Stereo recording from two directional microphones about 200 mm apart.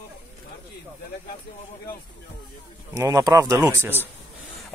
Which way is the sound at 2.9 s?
15° right (ahead or behind).